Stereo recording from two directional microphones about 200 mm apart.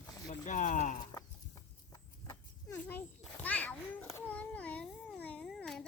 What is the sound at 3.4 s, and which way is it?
Babbling, 10° left (ahead or behind).